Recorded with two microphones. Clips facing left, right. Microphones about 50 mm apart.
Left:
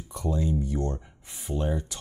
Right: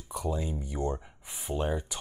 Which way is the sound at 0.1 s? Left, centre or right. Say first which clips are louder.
Left 4 dB; centre.